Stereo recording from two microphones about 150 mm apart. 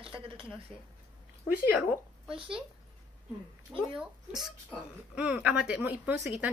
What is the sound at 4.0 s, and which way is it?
A woman's voice, 5° right (ahead or behind).